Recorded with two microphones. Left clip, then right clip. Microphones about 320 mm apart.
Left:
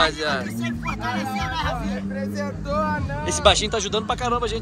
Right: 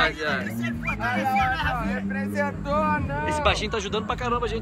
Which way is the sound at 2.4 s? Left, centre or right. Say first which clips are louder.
Right 1 dB; right.